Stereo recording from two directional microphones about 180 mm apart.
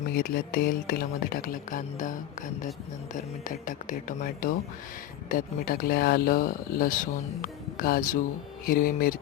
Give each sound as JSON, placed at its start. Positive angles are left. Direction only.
{"t": 0.1, "sound": "speech", "side_deg": 55}